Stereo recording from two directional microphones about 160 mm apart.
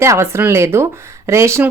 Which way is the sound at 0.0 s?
15° right (ahead or behind).